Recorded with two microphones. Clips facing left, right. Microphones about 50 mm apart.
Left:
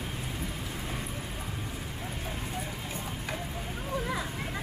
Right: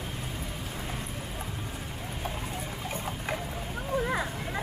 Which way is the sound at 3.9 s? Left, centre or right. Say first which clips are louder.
Right 4 dB; centre.